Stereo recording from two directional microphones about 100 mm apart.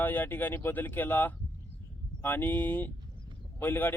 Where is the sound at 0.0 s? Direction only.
20° left (ahead or behind).